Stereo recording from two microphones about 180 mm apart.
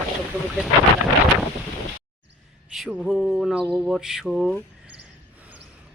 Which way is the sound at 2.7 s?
Centre (ahead or behind).